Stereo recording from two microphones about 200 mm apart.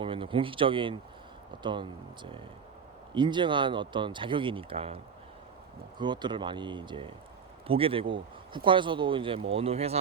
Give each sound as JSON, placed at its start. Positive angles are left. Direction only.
{"t": 0.0, "sound": "speech", "side_deg": -25}
{"t": 3.2, "sound": "speech", "side_deg": -25}
{"t": 6.0, "sound": "speech", "side_deg": -20}